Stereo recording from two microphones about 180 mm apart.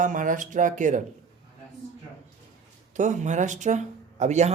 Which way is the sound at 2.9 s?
40° right (ahead or behind).